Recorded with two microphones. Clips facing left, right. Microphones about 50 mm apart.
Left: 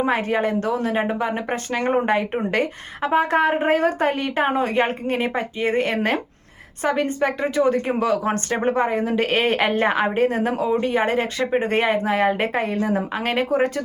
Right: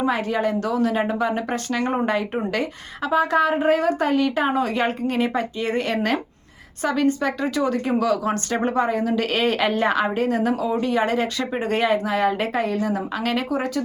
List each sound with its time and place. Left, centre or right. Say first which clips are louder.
0.0 s speech: left 1 dB; left